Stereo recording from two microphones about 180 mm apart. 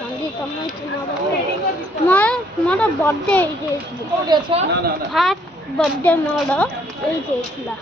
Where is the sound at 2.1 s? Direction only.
5° left (ahead or behind).